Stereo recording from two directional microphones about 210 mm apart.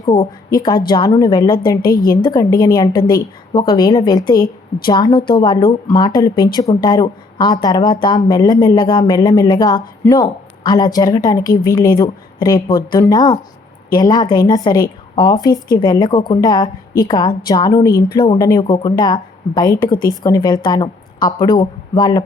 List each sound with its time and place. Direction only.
0.0 s a woman's voice: 20° left (ahead or behind)
19.8 s speech: 40° left (ahead or behind)
20.1 s a woman's voice: 15° left (ahead or behind)